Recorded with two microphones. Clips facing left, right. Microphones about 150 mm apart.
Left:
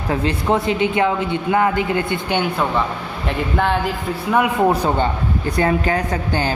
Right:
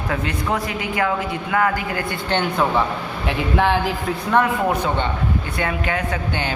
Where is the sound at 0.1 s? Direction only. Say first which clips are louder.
Left 5 dB; 30° left (ahead or behind).